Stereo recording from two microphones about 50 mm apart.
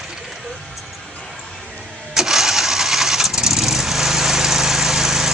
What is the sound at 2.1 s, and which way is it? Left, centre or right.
Engine starting, centre.